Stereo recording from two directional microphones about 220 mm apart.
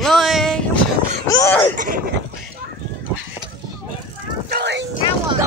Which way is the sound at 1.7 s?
35° right (ahead or behind).